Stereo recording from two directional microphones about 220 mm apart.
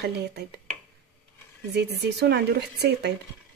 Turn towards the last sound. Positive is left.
turn(degrees=-50)  # may be behind; listen again after turning